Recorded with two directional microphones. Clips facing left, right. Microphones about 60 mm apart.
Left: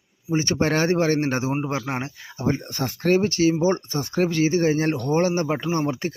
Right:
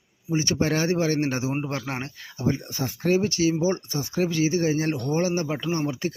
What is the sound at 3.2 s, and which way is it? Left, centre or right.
Speech, left.